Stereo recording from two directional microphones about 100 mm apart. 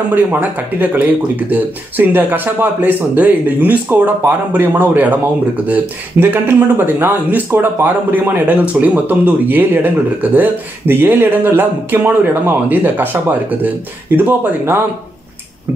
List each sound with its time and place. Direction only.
0.1 s speech: 20° right (ahead or behind)